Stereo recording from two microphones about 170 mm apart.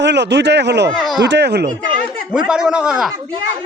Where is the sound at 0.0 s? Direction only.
90° right.